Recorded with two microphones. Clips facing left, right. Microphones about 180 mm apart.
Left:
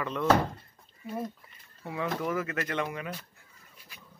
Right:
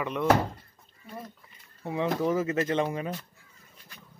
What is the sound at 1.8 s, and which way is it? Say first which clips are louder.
Speech: right 5 dB; 25° right (ahead or behind).